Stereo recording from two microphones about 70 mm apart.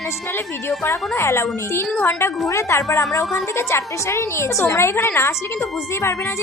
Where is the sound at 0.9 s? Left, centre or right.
Left.